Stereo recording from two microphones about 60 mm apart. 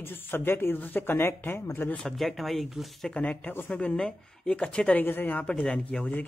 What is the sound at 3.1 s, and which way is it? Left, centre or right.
Speech, centre.